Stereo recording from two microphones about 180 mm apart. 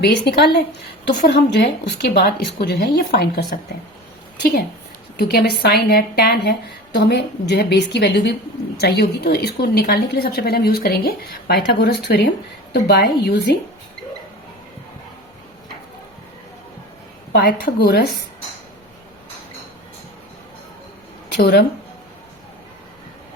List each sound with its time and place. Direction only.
0.0 s a woman's voice: 65° left (ahead or behind)
17.3 s a woman's voice: 65° left (ahead or behind)
21.3 s a woman's voice: 65° left (ahead or behind)